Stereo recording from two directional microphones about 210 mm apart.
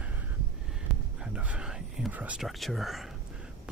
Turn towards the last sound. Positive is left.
turn(degrees=0)  # may be behind; listen again after turning